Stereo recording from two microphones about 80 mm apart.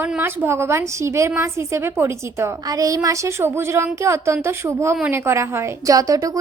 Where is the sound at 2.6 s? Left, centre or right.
Right.